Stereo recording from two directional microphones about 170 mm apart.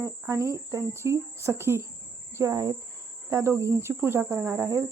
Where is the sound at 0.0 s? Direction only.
20° right (ahead or behind).